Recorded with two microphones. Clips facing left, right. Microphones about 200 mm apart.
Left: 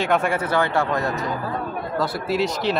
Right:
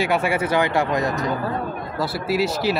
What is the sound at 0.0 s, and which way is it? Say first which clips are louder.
Speech: even; 10° right (ahead or behind).